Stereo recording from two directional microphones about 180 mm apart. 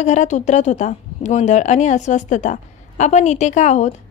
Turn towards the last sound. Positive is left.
turn(degrees=40)  # may be behind; listen again after turning